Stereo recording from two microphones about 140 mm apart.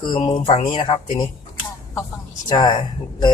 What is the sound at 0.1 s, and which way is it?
A man's voice, 35° left (ahead or behind).